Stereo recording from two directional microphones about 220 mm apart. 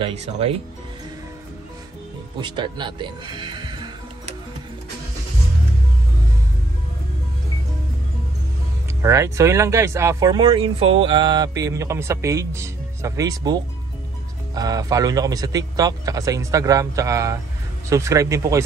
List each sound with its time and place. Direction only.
0.0 s speech: 25° right (ahead or behind)
2.4 s music: 20° right (ahead or behind)
9.0 s speech: 15° right (ahead or behind)